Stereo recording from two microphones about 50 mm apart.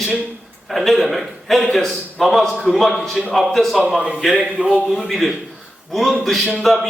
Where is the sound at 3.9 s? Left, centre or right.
Centre.